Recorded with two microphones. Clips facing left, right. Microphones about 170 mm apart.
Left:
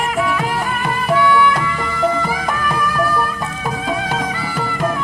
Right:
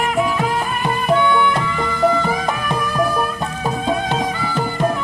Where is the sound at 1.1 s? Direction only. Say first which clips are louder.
Left 2 dB; 25° right (ahead or behind).